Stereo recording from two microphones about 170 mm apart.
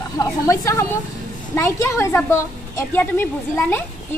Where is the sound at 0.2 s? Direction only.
20° left (ahead or behind).